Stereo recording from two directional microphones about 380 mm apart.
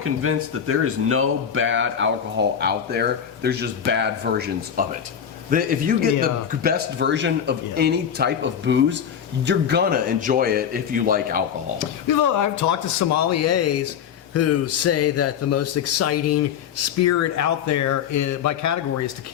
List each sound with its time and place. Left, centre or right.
0.0 s speech: right
11.8 s speech: left